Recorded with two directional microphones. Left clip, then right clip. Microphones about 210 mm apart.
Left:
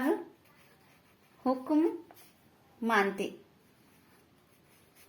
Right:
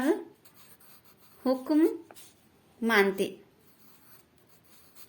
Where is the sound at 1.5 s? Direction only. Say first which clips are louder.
Right 3 dB; 55° right (ahead or behind).